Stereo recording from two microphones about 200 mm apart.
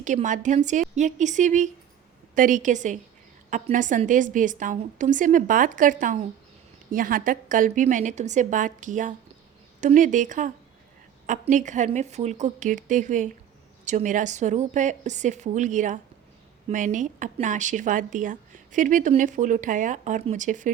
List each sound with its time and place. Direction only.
0.0 s a woman's voice: 40° right (ahead or behind)